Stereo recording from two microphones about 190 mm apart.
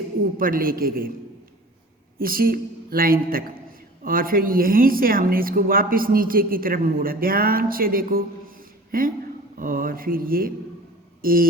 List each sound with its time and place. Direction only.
0.3 s a woman's voice: 50° right (ahead or behind)
2.1 s a woman's voice: 50° right (ahead or behind)
11.2 s a sound: 50° right (ahead or behind)